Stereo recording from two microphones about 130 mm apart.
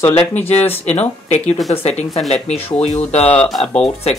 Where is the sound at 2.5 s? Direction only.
55° left (ahead or behind).